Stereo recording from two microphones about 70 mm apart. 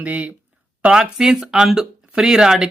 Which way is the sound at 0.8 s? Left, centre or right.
Centre.